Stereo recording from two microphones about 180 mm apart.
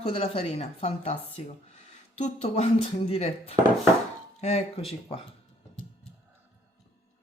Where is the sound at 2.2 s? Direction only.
35° left (ahead or behind).